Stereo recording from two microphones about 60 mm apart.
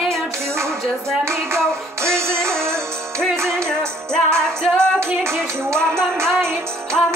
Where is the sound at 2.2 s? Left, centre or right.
Right.